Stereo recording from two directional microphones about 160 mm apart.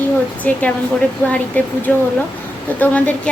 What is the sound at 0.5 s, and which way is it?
A woman's voice, 10° left (ahead or behind).